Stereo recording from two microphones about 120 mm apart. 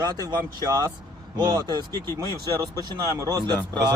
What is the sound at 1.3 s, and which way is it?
Speech, 30° right (ahead or behind).